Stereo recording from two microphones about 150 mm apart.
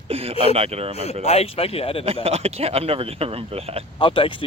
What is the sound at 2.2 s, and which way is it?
Speech, 45° right (ahead or behind).